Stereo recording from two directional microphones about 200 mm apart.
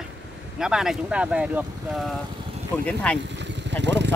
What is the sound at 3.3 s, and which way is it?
Vehicle, 65° right (ahead or behind).